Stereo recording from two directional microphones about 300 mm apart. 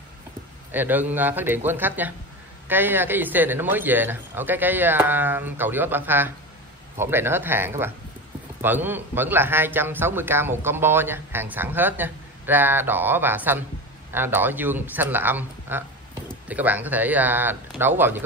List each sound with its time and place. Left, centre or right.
0.7 s speech: centre